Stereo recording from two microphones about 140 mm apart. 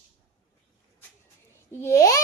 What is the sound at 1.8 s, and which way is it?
Speech, 20° left (ahead or behind).